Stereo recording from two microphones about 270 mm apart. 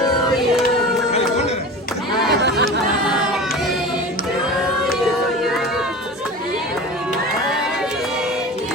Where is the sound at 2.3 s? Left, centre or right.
Right.